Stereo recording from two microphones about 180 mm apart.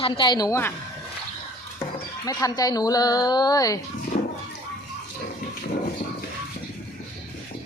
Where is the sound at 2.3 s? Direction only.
20° left (ahead or behind).